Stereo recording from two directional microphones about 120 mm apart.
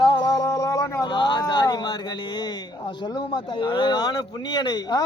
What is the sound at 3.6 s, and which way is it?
Speech, 40° left (ahead or behind).